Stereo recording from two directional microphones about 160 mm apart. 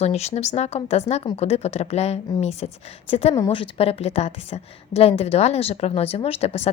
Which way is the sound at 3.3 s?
20° left (ahead or behind).